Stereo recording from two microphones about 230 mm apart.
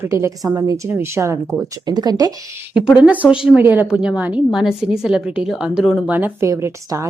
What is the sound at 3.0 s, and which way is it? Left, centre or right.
A woman's voice, centre.